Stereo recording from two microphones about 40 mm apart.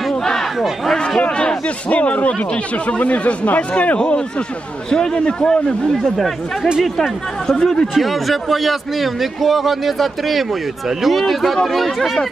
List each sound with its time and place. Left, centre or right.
0.2 s crowd: centre
1.3 s speech: left
4.9 s speech: centre
7.9 s a man's voice: centre